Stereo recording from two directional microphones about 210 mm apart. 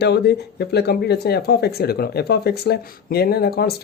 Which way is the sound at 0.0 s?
50° left (ahead or behind).